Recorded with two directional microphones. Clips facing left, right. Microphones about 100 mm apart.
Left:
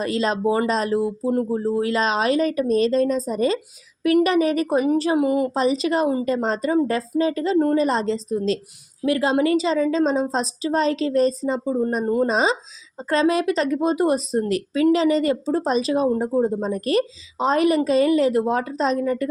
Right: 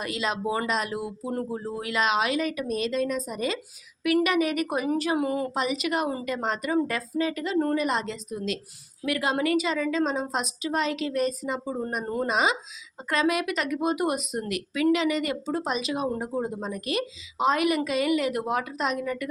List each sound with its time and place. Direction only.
0.0 s speech: 35° left (ahead or behind); by 5.5 s 20° left (ahead or behind)
5.5 s speech: 35° left (ahead or behind)